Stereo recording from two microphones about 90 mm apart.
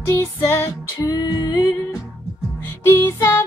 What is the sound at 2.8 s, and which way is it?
Music, 30° left (ahead or behind).